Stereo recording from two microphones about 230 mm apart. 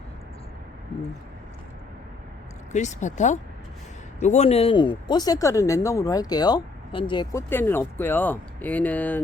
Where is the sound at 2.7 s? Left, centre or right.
Left; by 9.2 s centre.